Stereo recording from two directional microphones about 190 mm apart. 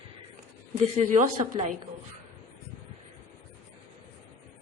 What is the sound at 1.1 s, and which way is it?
Speech, 40° right (ahead or behind).